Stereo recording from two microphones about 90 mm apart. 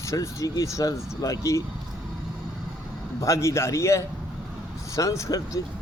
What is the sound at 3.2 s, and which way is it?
A man's voice, 35° left (ahead or behind).